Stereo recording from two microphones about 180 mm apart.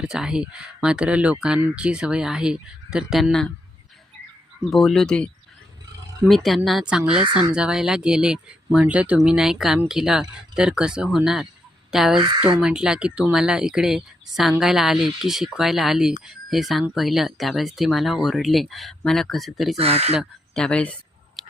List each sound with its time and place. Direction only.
0.0 s speech: 5° right (ahead or behind)
4.6 s speech: centre (ahead or behind)
19.7 s speech: 35° right (ahead or behind)
20.1 s speech: 5° left (ahead or behind)
21.4 s a sound: centre (ahead or behind)